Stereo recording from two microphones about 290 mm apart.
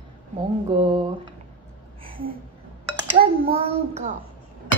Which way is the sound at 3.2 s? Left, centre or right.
Centre.